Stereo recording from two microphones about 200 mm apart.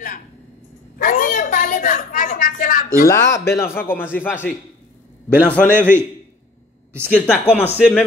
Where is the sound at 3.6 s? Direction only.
10° left (ahead or behind).